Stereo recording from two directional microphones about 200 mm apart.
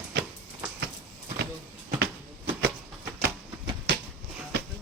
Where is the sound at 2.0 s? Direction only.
50° right (ahead or behind).